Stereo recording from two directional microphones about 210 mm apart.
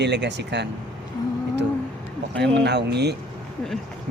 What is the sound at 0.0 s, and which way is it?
Speech, 55° right (ahead or behind).